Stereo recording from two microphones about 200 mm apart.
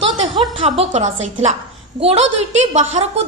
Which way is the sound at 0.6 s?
35° right (ahead or behind).